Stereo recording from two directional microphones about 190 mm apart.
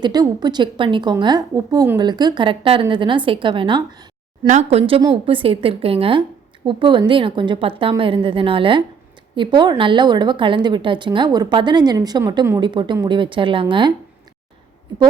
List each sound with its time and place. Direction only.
0.0 s a woman's voice: 20° right (ahead or behind)
4.4 s a woman's voice: 35° right (ahead or behind)